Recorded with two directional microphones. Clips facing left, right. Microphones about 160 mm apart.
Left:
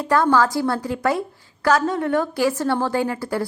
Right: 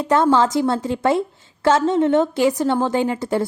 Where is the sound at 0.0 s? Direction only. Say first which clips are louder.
Right 2 dB; 20° right (ahead or behind).